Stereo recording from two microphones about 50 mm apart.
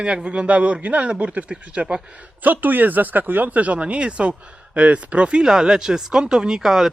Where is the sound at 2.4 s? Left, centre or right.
Right.